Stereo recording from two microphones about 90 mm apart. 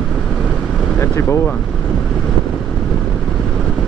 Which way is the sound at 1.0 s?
30° left (ahead or behind).